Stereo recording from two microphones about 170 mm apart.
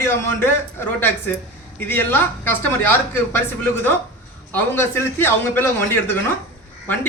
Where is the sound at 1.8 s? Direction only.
10° left (ahead or behind).